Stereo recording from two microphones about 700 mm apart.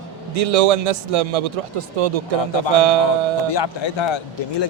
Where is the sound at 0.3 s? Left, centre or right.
Right.